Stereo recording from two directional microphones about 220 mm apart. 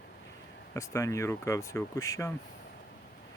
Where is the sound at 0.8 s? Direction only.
15° left (ahead or behind).